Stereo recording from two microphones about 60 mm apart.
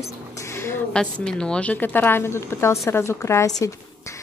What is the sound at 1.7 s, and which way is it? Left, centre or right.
A woman's voice, left.